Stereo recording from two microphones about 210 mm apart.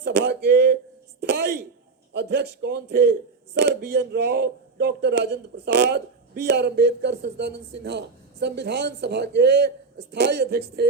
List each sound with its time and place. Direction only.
0.0 s speech: 55° right (ahead or behind)